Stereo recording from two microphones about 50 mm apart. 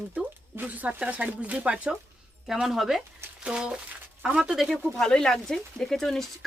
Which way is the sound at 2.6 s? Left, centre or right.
Centre.